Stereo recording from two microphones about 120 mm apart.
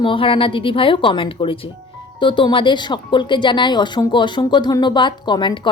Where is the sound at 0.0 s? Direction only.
45° left (ahead or behind).